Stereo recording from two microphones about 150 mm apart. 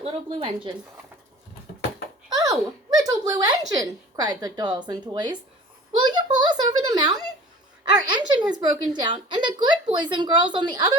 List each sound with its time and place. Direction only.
0.0 s a woman's voice: 35° right (ahead or behind)
2.3 s a sound: 25° right (ahead or behind)
6.0 s a woman's voice: 30° right (ahead or behind)